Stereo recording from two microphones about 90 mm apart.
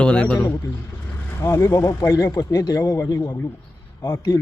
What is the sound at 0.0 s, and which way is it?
Speech, 10° left (ahead or behind).